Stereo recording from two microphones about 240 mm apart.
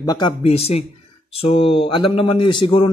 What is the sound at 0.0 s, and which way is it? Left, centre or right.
Speech, centre.